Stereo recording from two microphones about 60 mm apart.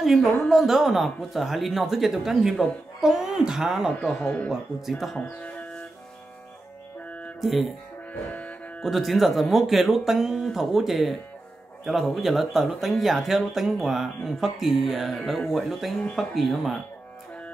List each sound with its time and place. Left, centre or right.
0.0 s speech: centre
4.0 s speech: centre
5.2 s speech: left
7.1 s music: left
7.3 s speech: centre
8.1 s music: left
8.8 s speech: centre